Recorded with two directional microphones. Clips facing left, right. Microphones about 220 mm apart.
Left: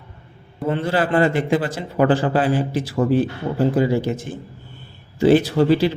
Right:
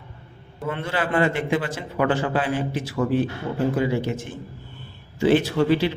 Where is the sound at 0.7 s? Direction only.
35° left (ahead or behind).